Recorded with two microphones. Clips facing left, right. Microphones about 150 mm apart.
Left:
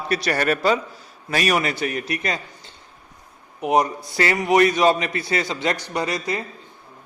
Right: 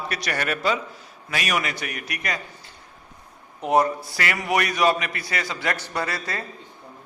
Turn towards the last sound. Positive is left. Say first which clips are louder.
# left 4 dB
turn(degrees=15)  # may be behind; listen again after turning